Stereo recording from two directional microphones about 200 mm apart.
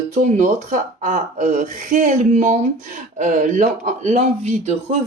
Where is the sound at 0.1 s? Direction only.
35° right (ahead or behind).